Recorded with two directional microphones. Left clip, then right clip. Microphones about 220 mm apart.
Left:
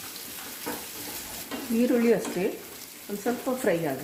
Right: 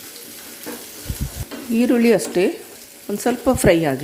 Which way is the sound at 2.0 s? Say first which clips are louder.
Right 8 dB; 40° right (ahead or behind).